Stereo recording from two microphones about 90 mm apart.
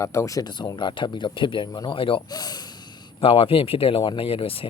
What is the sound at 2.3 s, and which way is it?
Speech, 50° left (ahead or behind).